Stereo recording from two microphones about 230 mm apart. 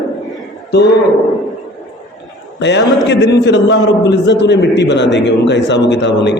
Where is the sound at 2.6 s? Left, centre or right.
Left.